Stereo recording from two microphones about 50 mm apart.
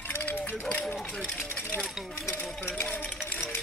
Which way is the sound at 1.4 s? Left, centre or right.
Left.